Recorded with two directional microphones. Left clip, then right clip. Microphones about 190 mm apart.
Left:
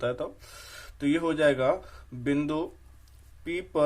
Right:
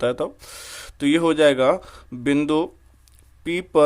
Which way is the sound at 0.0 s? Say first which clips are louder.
Right 8 dB; 50° right (ahead or behind).